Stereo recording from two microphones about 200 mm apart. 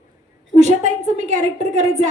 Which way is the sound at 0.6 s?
35° right (ahead or behind).